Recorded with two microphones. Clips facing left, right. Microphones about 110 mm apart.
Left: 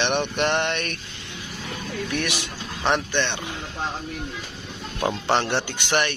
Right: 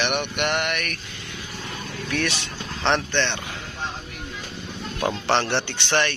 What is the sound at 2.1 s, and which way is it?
Speech, 15° left (ahead or behind).